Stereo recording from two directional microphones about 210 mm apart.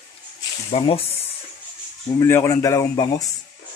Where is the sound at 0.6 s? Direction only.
30° left (ahead or behind).